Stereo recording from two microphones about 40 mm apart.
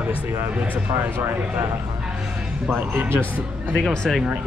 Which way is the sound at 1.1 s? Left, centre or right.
Right.